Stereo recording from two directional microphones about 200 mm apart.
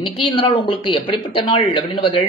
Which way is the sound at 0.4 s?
25° left (ahead or behind).